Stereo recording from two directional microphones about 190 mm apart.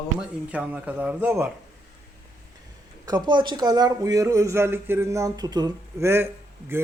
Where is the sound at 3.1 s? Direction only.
20° right (ahead or behind).